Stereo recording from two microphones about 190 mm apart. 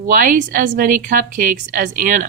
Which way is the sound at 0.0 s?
45° right (ahead or behind).